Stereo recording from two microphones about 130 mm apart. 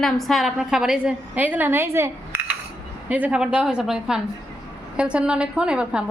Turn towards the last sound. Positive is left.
turn(degrees=-5)  # may be behind; listen again after turning